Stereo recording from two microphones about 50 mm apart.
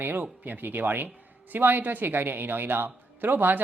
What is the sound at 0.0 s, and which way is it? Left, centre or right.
A woman's voice, right.